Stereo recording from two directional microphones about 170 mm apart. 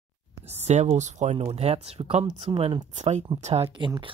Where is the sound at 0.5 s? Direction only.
40° right (ahead or behind).